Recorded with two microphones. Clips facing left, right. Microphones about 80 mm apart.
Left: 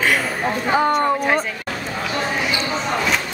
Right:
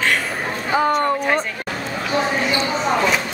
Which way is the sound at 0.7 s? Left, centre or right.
Centre.